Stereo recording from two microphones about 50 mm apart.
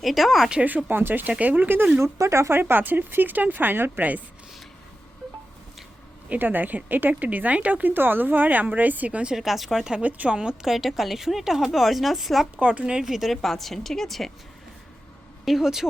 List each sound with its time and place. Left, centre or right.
0.0 s a woman's voice: centre
0.9 s speech: right
2.0 s speech: right
2.5 s speech: right
6.2 s speech: right
9.3 s a woman's voice: centre
10.0 s speech: right
10.3 s a woman's voice: centre
12.5 s a woman's voice: right
12.8 s a woman's voice: centre
15.4 s speech: centre